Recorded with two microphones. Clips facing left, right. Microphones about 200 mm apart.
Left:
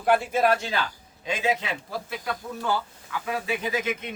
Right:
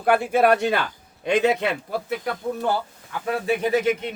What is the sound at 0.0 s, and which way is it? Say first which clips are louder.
Speech: right 3 dB; 60° right (ahead or behind).